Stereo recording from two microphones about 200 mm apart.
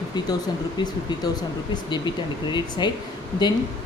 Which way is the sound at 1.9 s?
25° left (ahead or behind).